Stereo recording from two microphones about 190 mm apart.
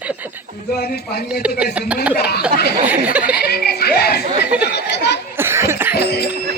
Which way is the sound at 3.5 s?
55° left (ahead or behind).